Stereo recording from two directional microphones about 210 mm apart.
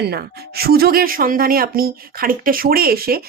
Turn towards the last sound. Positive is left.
turn(degrees=-45)  # may be behind; listen again after turning